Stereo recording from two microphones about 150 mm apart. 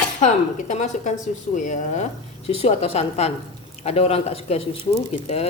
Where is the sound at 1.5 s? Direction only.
55° left (ahead or behind).